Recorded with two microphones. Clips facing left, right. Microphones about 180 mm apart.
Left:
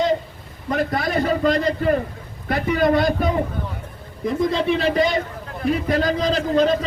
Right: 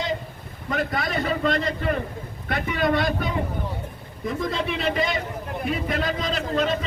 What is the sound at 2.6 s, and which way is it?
Speech, 45° left (ahead or behind).